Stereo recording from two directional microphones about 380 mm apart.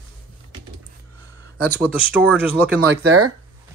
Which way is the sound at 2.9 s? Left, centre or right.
Right.